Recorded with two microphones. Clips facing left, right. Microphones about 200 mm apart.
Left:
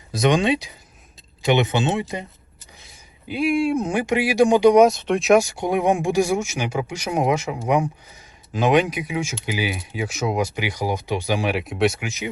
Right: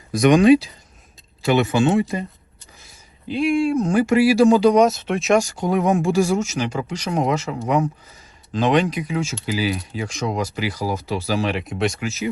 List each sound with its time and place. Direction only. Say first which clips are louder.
0.1 s speech: right 6 dB; 25° left (ahead or behind)
3.2 s speech: right 1 dB; centre (ahead or behind)
3.9 s speech: right 6 dB; 15° left (ahead or behind)
4.9 s speech: left 2 dB; 5° right (ahead or behind)
11.9 s speech: right 4 dB; 15° left (ahead or behind)